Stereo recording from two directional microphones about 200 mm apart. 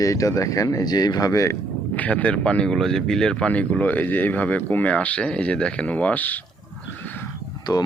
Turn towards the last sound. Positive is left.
turn(degrees=15)  # may be behind; listen again after turning